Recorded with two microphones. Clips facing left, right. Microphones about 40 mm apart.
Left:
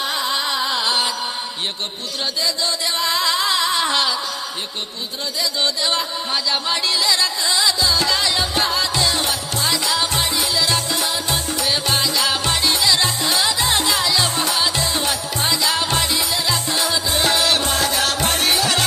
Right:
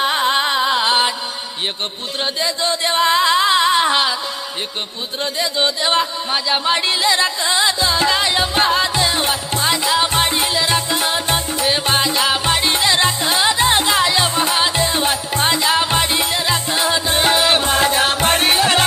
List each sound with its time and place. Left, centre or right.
0.0 s carnatic music: right
2.2 s a sound: right
5.5 s music: right
10.2 s music: right
10.6 s music: right
16.1 s music: right